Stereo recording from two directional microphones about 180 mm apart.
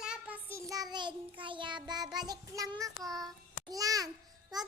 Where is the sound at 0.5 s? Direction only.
20° right (ahead or behind).